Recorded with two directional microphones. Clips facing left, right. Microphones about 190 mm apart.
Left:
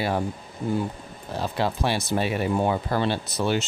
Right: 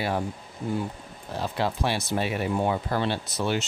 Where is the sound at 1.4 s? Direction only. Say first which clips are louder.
Left 2 dB; 35° left (ahead or behind).